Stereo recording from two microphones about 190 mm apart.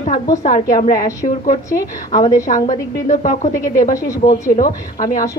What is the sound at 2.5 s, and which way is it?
Speech, 35° left (ahead or behind).